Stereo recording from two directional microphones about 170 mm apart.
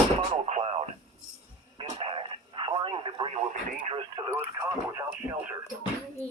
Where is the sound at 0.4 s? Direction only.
40° right (ahead or behind); by 5.5 s 15° right (ahead or behind).